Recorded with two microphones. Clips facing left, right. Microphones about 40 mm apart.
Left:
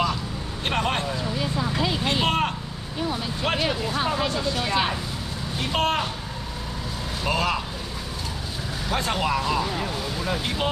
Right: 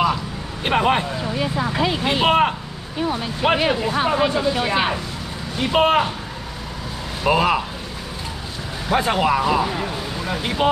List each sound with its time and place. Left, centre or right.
0.7 s speech: centre
7.2 s speech: centre
8.8 s speech: centre